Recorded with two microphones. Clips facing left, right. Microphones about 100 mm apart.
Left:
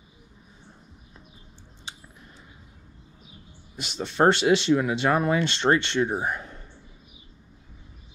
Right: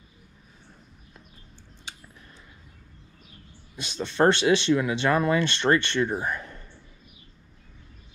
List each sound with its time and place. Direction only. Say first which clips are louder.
4.2 s speech: left 1 dB; 20° left (ahead or behind)